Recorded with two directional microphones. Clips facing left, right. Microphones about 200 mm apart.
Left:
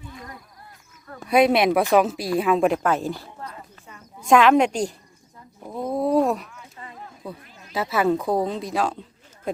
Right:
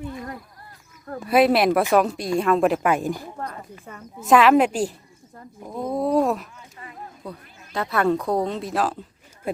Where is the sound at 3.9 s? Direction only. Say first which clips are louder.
Right 6 dB; 50° right (ahead or behind).